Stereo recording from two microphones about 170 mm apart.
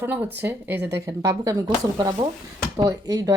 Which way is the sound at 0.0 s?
10° right (ahead or behind).